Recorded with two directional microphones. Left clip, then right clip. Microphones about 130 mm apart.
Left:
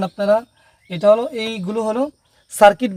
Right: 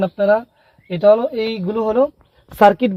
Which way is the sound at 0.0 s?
5° left (ahead or behind).